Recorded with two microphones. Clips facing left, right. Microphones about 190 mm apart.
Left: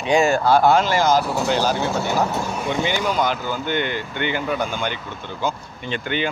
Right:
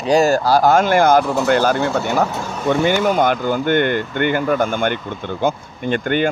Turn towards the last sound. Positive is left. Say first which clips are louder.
# right 7 dB
turn(degrees=-50)  # may be behind; listen again after turning